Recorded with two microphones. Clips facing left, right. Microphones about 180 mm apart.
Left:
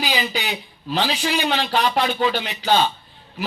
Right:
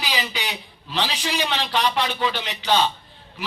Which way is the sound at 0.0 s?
40° left (ahead or behind).